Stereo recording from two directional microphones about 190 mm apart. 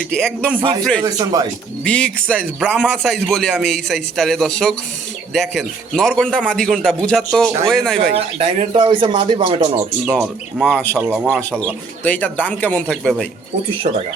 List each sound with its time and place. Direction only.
0.1 s a man's voice: 5° left (ahead or behind)
0.6 s speech: 20° right (ahead or behind)
1.8 s a man's voice: 5° left (ahead or behind)
8.1 s speech: 30° right (ahead or behind)
10.2 s a man's voice: 5° left (ahead or behind)